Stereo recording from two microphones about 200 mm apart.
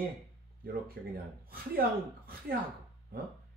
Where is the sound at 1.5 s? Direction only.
50° right (ahead or behind).